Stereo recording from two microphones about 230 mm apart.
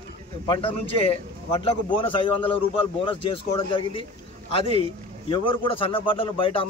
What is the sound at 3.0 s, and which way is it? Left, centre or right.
A man's voice, left.